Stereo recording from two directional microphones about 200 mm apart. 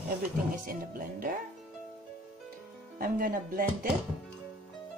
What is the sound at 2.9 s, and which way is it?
Speech, 45° right (ahead or behind).